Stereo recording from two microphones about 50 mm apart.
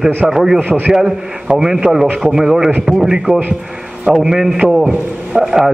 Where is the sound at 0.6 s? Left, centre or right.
Right.